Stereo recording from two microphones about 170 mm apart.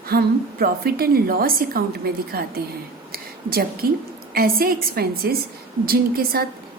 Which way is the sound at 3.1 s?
60° right (ahead or behind).